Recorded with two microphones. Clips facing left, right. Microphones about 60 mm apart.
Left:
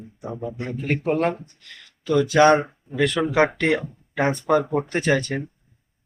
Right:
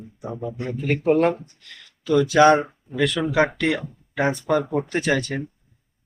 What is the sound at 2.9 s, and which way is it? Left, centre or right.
Speech, left.